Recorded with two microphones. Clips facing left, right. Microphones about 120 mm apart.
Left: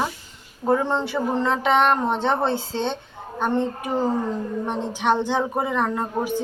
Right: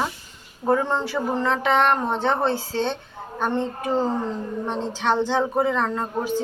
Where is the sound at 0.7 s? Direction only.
15° left (ahead or behind).